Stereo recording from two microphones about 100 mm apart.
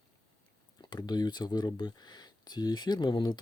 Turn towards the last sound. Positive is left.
turn(degrees=45)  # may be behind; listen again after turning